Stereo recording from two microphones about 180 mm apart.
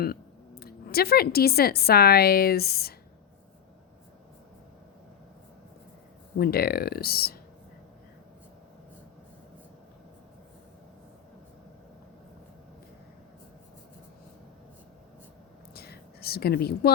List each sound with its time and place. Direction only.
0.6 s a woman's voice: 60° left (ahead or behind)
6.4 s a woman's voice: 60° left (ahead or behind)
15.7 s a sound: 60° left (ahead or behind)